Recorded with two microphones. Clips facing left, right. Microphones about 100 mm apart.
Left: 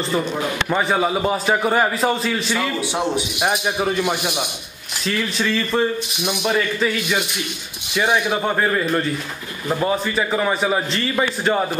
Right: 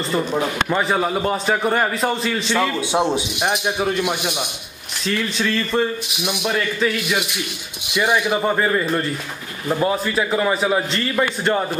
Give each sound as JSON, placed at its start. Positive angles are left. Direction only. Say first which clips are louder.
{"t": 0.7, "sound": "speech", "louder": "even", "side_deg": 0}
{"t": 2.9, "sound": "a man's voice", "louder": "right 3 dB", "side_deg": -20}
{"t": 3.3, "sound": "speech", "louder": "even", "side_deg": 5}
{"t": 7.9, "sound": "speech", "louder": "even", "side_deg": 10}